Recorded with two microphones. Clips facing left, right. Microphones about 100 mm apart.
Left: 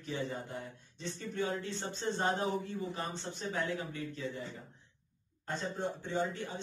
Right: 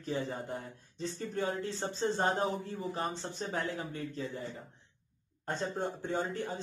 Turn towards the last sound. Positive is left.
turn(degrees=-45)  # may be behind; listen again after turning